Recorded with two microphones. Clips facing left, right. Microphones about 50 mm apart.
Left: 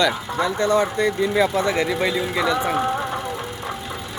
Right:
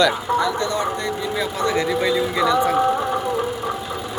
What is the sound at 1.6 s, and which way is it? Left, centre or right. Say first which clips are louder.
A man's voice: right 1 dB; centre.